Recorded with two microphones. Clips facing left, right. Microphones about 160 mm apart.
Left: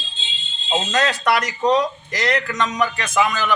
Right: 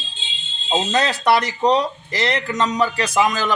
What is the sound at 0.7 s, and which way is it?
Speech, 30° right (ahead or behind).